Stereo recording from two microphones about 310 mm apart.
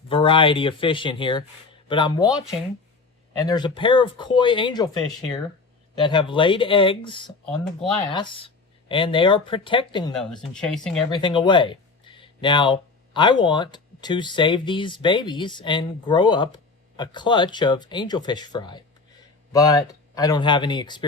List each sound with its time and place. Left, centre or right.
0.1 s speech: centre
3.3 s speech: centre
6.0 s speech: centre
11.1 s speech: centre